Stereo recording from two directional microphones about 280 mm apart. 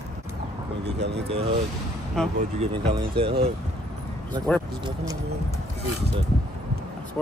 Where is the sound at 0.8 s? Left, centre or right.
Right.